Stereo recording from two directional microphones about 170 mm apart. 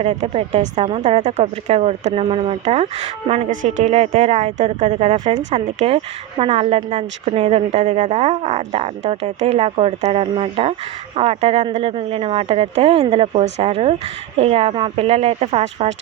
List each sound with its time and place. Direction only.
0.0 s speech: 40° right (ahead or behind)